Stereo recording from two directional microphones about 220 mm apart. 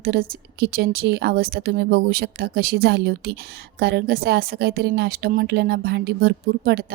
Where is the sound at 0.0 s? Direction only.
45° right (ahead or behind).